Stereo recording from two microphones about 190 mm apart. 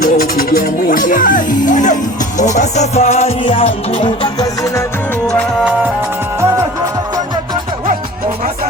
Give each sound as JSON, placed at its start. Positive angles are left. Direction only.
{"t": 0.0, "sound": "speech", "side_deg": 50}
{"t": 2.4, "sound": "music", "side_deg": 40}
{"t": 5.2, "sound": "music", "side_deg": 5}